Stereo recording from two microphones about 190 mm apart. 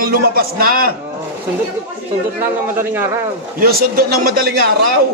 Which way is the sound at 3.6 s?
50° right (ahead or behind).